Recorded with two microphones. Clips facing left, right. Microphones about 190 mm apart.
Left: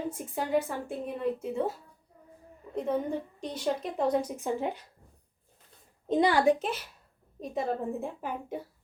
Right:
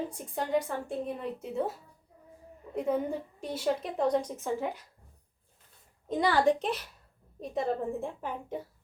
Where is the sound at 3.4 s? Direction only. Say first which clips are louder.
Right 2 dB; 5° right (ahead or behind); by 4.7 s 15° left (ahead or behind).